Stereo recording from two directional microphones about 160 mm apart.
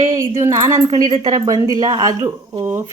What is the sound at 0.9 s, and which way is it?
A woman's voice, 30° right (ahead or behind).